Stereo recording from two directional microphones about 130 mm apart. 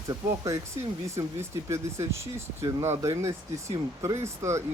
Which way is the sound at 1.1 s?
20° right (ahead or behind).